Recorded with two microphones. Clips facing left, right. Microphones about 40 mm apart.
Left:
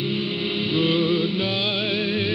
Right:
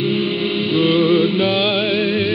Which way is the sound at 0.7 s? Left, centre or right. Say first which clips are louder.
Right 7 dB; centre.